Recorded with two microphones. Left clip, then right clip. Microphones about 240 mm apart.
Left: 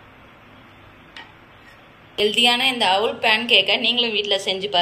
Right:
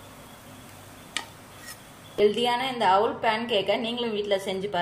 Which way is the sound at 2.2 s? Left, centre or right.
Right.